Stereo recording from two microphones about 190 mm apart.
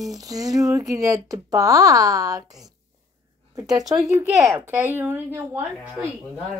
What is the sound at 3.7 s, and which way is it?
A woman's voice, 20° right (ahead or behind).